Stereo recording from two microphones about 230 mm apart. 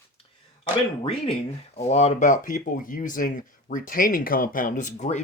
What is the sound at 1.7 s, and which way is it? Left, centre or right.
Speech, left.